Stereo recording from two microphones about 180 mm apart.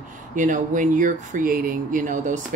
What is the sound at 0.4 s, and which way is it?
Speech, 45° right (ahead or behind).